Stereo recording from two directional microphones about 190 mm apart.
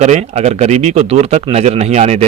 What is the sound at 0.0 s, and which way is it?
A man's voice, 35° right (ahead or behind).